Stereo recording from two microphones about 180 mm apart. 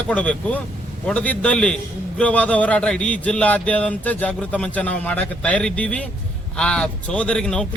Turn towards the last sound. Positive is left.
turn(degrees=5)  # may be behind; listen again after turning